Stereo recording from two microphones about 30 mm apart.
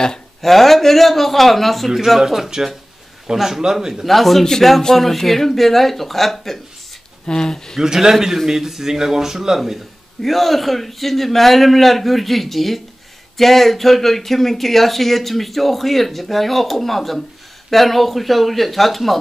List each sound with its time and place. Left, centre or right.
0.4 s speech: centre
2.0 s speech: centre
4.0 s speech: centre
7.2 s speech: left
7.8 s speech: centre
10.2 s speech: centre